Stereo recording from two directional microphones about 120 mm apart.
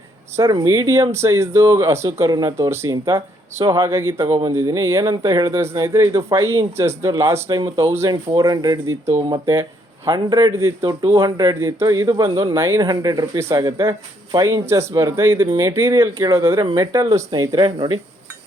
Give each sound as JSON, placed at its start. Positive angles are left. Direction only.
{"t": 0.3, "sound": "speech", "side_deg": -25}